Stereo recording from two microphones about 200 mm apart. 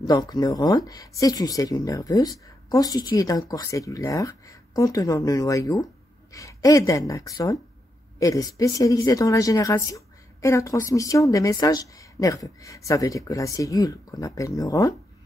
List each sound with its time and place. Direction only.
0.0 s a woman's voice: 20° left (ahead or behind)